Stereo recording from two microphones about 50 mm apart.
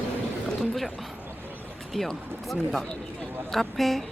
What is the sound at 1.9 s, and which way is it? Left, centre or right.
Speech, centre.